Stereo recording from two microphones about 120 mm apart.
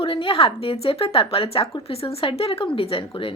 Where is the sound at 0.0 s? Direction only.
45° left (ahead or behind).